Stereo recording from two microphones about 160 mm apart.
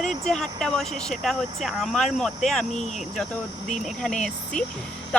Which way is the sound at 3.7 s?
5° left (ahead or behind).